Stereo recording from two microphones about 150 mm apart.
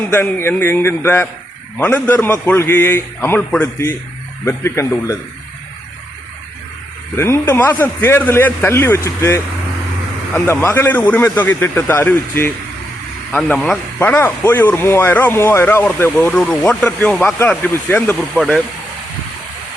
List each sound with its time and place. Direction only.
0.0 s speech: 15° left (ahead or behind)
7.2 s speech: 15° left (ahead or behind)
13.3 s speech: 5° left (ahead or behind)